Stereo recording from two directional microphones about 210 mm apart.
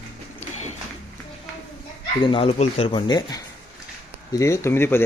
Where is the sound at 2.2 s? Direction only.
25° left (ahead or behind).